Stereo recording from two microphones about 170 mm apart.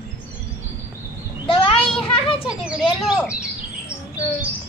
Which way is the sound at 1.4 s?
30° left (ahead or behind).